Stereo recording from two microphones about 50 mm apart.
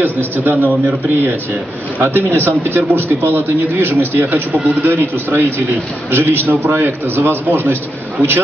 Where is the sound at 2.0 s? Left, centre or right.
Right.